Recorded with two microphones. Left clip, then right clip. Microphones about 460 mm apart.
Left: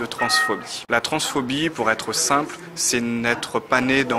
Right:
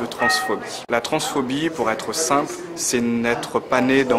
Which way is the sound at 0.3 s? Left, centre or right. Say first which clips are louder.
Left 1 dB; left.